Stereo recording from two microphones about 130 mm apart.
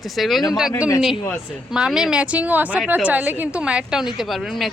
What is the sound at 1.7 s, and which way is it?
A woman's voice, 5° right (ahead or behind).